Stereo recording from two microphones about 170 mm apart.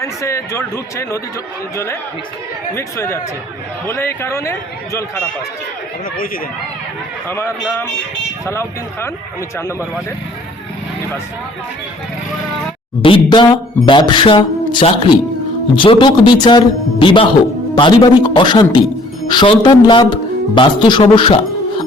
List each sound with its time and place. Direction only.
0.0 s speech: 15° left (ahead or behind)
7.3 s speech: 15° left (ahead or behind)
13.0 s a man's voice: 30° left (ahead or behind)